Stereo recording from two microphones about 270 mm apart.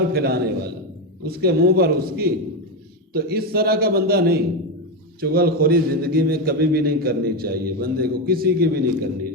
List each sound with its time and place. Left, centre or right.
0.1 s a man's voice: right